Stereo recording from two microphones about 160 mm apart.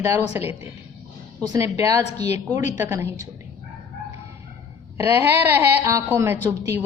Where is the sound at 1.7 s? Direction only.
20° right (ahead or behind).